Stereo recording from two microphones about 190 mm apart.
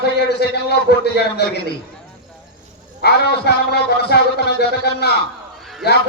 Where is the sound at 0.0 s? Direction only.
60° left (ahead or behind).